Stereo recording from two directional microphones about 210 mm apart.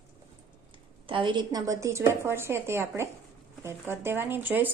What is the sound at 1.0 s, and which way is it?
A woman's voice, 25° right (ahead or behind).